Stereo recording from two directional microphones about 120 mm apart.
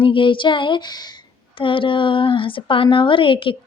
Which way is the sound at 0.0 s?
45° left (ahead or behind).